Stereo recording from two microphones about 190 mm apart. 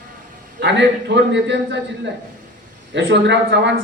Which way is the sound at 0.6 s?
65° right (ahead or behind).